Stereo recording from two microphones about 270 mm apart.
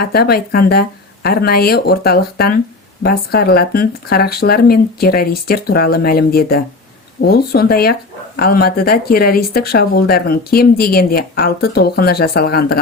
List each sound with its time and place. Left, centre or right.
0.0 s speech: left